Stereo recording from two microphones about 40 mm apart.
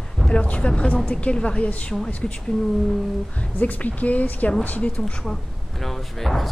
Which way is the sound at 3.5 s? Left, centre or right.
Left.